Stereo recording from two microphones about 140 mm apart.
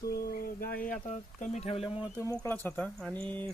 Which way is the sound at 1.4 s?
50° left (ahead or behind).